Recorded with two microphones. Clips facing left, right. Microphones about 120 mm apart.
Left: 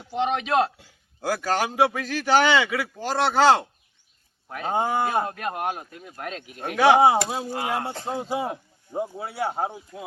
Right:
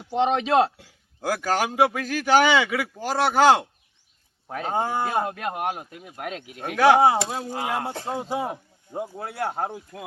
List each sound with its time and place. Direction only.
0.1 s a man's voice: 30° right (ahead or behind)
1.2 s speech: 5° right (ahead or behind)
4.6 s speech: 10° left (ahead or behind)
5.2 s speech: 10° right (ahead or behind)
7.0 s speech: 10° left (ahead or behind)